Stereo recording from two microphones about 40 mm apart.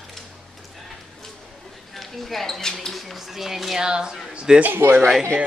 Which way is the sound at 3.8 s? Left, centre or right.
Centre.